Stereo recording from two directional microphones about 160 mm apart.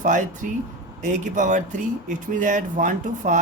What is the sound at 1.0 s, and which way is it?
Speech, 50° right (ahead or behind).